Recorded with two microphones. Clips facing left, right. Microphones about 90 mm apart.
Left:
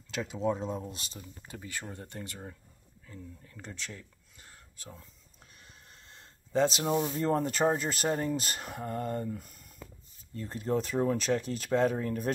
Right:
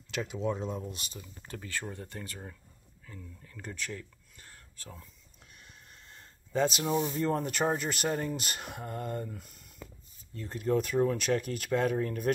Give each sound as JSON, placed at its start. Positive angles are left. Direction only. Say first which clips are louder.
{"t": 0.1, "sound": "speech", "louder": "left 1 dB", "side_deg": 35}
{"t": 1.5, "sound": "speech", "louder": "right 3 dB", "side_deg": 20}
{"t": 5.4, "sound": "a sound", "louder": "right 1 dB", "side_deg": 35}
{"t": 7.1, "sound": "speech", "louder": "left 1 dB", "side_deg": 35}